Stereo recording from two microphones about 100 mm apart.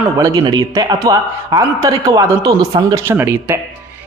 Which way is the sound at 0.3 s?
50° right (ahead or behind).